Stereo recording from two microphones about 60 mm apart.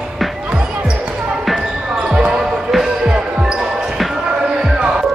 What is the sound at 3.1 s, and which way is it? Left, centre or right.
Basketball bounce, centre.